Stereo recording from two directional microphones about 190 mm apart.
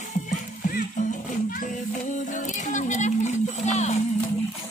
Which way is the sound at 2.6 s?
40° left (ahead or behind).